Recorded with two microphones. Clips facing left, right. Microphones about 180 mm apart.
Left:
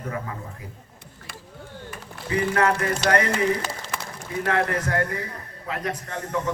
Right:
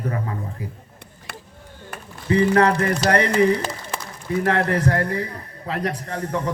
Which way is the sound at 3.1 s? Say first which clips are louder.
Right 4 dB; 35° right (ahead or behind).